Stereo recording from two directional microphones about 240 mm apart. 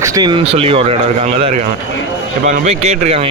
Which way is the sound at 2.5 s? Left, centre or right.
Right.